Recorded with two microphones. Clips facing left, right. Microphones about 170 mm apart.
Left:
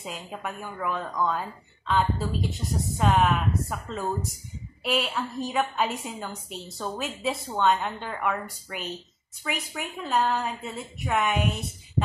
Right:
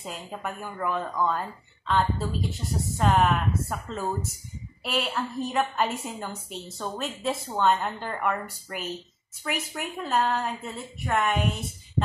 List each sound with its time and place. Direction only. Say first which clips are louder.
0.0 s speech: even; centre (ahead or behind)